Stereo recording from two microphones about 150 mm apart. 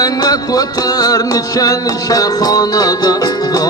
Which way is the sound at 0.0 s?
25° left (ahead or behind).